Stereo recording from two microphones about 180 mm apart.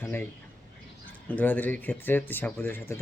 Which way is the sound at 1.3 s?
10° left (ahead or behind).